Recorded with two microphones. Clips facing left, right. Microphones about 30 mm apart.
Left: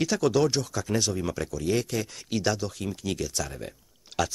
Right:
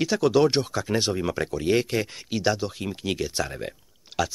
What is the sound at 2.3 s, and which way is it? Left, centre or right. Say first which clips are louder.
Speech: right 2 dB; centre.